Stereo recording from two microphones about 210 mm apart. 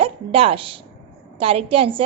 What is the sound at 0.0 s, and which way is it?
A woman's voice, 25° right (ahead or behind).